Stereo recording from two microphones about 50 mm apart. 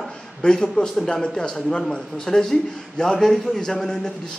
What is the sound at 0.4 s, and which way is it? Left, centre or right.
A man's voice, centre.